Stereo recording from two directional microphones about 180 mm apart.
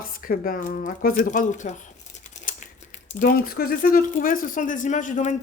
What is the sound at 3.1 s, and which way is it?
Speech, 50° left (ahead or behind).